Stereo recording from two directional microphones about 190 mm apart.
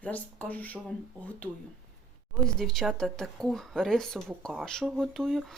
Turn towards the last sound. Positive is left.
turn(degrees=0)  # may be behind; listen again after turning